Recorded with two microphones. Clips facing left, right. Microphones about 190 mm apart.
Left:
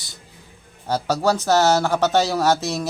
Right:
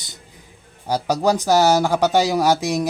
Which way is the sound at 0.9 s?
15° right (ahead or behind).